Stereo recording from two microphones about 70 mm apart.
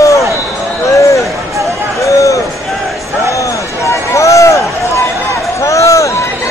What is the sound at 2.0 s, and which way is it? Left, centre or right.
Run, left.